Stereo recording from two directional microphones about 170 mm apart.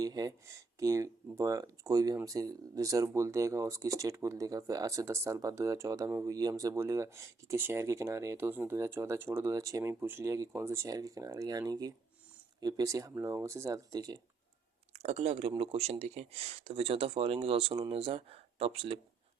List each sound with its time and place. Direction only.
0.0 s speech: 20° right (ahead or behind)
14.9 s speech: 40° right (ahead or behind)